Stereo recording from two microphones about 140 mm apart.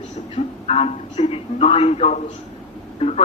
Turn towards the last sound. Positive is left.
turn(degrees=50)  # may be behind; listen again after turning